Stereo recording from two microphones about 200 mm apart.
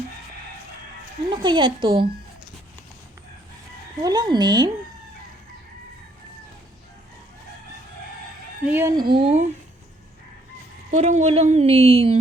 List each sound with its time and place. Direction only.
1.3 s speech: 25° right (ahead or behind)
4.0 s speech: 20° right (ahead or behind)
8.6 s speech: 10° right (ahead or behind); by 9.5 s 30° right (ahead or behind)
10.9 s a woman's voice: 35° right (ahead or behind)